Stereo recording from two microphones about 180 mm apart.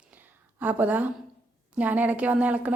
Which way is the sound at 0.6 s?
10° right (ahead or behind).